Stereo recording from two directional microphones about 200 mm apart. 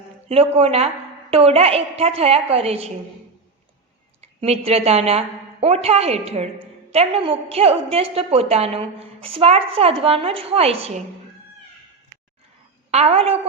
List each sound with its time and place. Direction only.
0.3 s a woman's voice: 30° right (ahead or behind)
4.2 s a woman's voice: 30° right (ahead or behind)
12.9 s a woman's voice: 30° right (ahead or behind)